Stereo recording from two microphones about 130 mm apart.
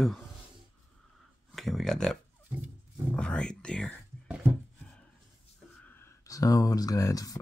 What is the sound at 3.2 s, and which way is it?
Speech, 5° left (ahead or behind).